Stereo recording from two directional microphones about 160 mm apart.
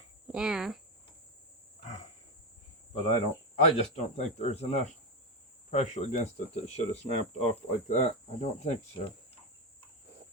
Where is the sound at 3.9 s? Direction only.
45° left (ahead or behind).